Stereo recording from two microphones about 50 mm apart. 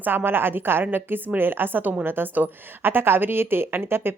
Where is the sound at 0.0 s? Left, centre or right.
Right.